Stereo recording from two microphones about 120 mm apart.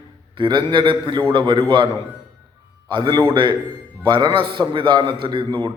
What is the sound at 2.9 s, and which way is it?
A man's voice, 35° right (ahead or behind).